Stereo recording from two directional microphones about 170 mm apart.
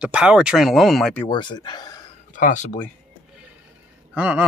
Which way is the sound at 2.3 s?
50° left (ahead or behind).